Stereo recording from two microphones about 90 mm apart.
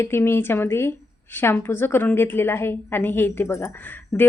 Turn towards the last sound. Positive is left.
turn(degrees=20)  # may be behind; listen again after turning